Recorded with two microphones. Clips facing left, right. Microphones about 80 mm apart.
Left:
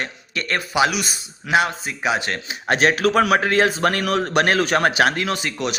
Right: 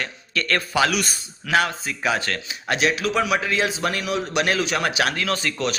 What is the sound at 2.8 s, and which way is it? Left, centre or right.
A man's voice, left.